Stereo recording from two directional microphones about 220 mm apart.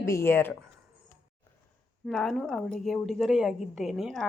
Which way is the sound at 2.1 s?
Centre (ahead or behind).